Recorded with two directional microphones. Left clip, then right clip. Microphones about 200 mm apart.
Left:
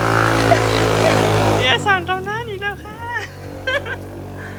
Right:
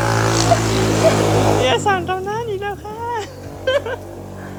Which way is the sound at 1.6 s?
20° right (ahead or behind).